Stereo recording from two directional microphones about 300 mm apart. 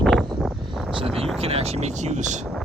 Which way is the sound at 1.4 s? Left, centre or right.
Centre.